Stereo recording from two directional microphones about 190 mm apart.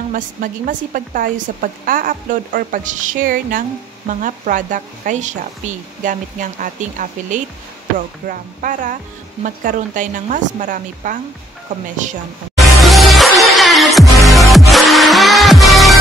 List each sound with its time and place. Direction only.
0.1 s a woman's voice: 45° right (ahead or behind)
12.5 s music: centre (ahead or behind)